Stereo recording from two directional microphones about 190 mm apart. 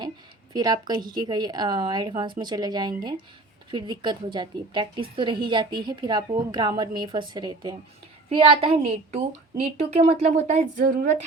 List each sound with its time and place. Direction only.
0.5 s a woman's voice: 20° right (ahead or behind); by 11.0 s 45° right (ahead or behind)